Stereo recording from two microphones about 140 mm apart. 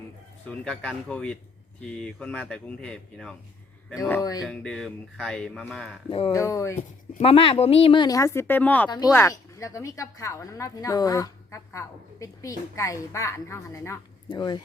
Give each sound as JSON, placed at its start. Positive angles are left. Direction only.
{"t": 0.4, "sound": "speech", "side_deg": 5}
{"t": 4.2, "sound": "a woman's voice", "side_deg": 25}
{"t": 4.4, "sound": "speech", "side_deg": 5}
{"t": 6.1, "sound": "speech", "side_deg": 40}
{"t": 6.3, "sound": "a woman's voice", "side_deg": 25}
{"t": 7.2, "sound": "a woman's voice", "side_deg": 45}
{"t": 9.1, "sound": "a woman's voice", "side_deg": 20}
{"t": 14.3, "sound": "a woman's voice", "side_deg": 30}